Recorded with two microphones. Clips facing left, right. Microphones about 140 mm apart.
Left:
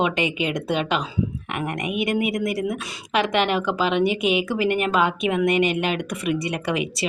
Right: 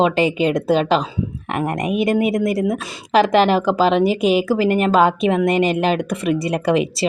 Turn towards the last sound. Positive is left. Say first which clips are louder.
# right 7 dB
turn(degrees=-35)  # may be behind; listen again after turning